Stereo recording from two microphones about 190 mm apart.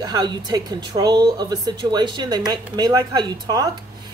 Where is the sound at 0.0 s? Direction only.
20° right (ahead or behind).